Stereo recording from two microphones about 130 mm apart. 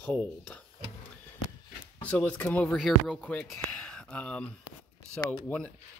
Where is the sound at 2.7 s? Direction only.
Centre (ahead or behind).